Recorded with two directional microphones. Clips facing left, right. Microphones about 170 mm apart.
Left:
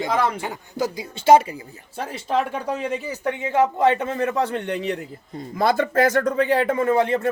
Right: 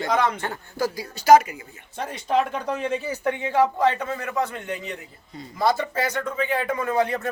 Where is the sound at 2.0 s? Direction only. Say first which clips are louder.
Even; 5° left (ahead or behind); by 4.5 s 30° left (ahead or behind).